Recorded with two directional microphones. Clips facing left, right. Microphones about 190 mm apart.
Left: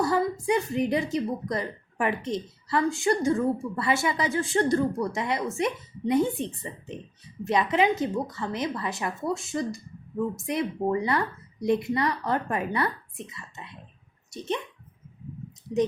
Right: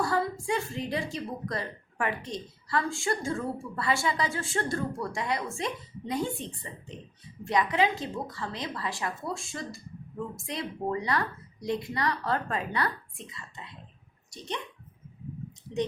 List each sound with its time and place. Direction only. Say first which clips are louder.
0.0 s a woman's voice: left 4 dB; 20° left (ahead or behind)